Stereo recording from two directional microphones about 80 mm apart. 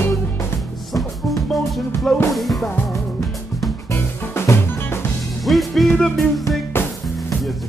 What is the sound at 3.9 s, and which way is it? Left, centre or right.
Music, left.